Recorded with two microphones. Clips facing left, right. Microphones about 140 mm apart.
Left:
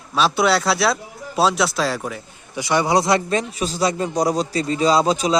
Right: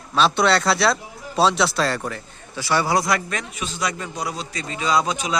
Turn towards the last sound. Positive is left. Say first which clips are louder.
# left 5 dB
turn(degrees=35)  # may be behind; listen again after turning